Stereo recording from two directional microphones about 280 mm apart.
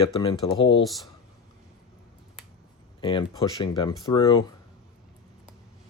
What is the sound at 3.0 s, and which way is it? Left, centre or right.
Speech, centre.